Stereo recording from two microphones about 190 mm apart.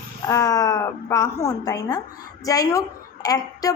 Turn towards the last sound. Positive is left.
turn(degrees=20)  # may be behind; listen again after turning